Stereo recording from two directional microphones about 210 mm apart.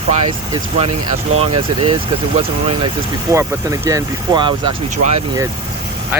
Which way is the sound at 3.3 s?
15° right (ahead or behind).